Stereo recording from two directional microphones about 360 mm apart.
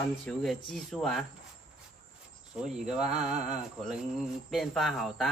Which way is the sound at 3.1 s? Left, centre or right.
Centre.